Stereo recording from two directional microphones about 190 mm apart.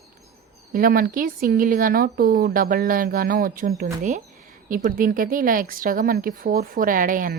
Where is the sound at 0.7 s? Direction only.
50° right (ahead or behind).